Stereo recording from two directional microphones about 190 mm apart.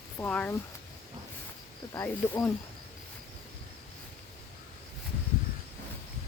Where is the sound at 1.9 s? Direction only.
15° left (ahead or behind).